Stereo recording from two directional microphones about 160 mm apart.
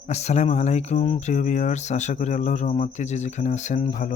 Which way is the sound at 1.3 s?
50° left (ahead or behind).